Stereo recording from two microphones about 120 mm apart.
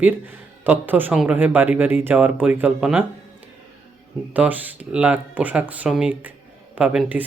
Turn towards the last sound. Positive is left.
turn(degrees=-10)  # may be behind; listen again after turning